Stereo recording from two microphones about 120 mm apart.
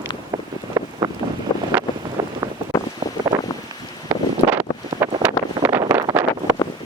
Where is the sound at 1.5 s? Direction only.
35° left (ahead or behind).